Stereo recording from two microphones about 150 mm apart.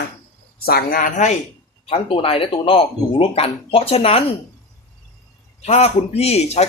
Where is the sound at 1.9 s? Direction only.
35° left (ahead or behind).